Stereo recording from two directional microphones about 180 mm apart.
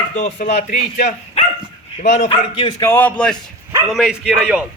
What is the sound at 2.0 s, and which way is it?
Speech, 45° left (ahead or behind).